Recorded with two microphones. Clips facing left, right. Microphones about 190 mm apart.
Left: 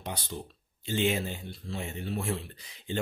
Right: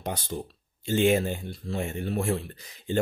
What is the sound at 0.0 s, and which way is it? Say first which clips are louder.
Speech: right 5 dB; 45° right (ahead or behind).